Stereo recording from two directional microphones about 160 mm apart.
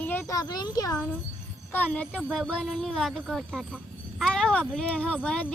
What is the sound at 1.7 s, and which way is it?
A child's voice, 10° left (ahead or behind).